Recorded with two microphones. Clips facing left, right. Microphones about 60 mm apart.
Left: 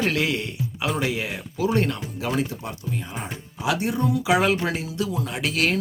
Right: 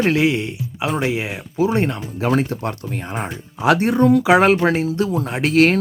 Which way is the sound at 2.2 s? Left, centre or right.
Right.